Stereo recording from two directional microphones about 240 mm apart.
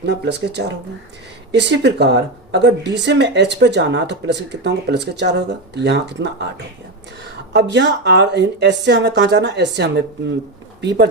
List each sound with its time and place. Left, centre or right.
0.0 s speech: right
7.5 s speech: right